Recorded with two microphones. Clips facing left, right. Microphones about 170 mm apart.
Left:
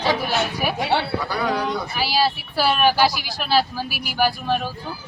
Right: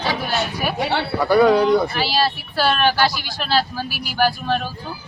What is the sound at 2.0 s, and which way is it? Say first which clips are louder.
Speech: right 1 dB; 5° left (ahead or behind).